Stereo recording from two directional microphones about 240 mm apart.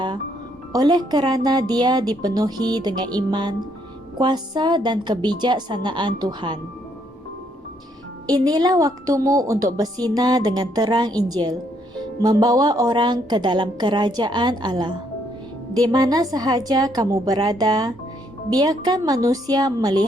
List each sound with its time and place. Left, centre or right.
0.7 s a woman's voice: centre
8.3 s a woman's voice: centre